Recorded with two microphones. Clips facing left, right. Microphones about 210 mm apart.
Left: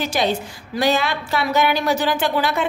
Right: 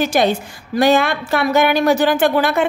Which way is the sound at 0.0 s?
50° right (ahead or behind).